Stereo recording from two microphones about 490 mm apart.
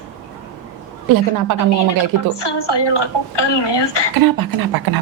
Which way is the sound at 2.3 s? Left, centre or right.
Left.